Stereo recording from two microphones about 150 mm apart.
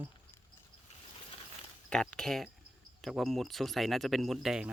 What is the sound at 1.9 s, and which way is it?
Speech, 5° left (ahead or behind).